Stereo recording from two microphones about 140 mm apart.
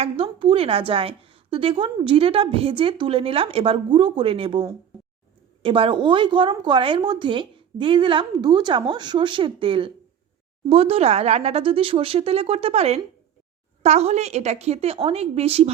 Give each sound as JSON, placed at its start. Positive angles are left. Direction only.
{"t": 0.0, "sound": "a woman's voice", "side_deg": -40}
{"t": 5.6, "sound": "a woman's voice", "side_deg": -40}